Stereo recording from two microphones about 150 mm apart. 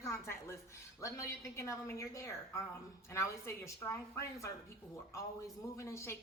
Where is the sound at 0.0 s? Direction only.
20° left (ahead or behind).